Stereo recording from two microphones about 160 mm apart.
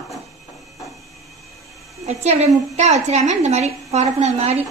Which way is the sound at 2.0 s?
40° right (ahead or behind).